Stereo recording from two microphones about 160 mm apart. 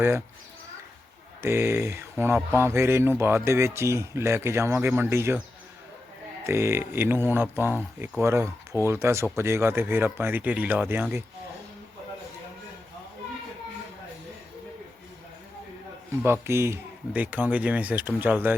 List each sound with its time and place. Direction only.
1.4 s speech: 15° right (ahead or behind)
6.4 s speech: 15° right (ahead or behind)
16.2 s speech: 15° right (ahead or behind)